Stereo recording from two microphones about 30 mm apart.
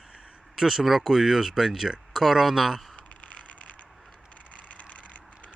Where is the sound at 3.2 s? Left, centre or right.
Left.